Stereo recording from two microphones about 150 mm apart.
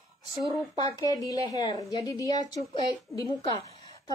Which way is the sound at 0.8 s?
25° left (ahead or behind).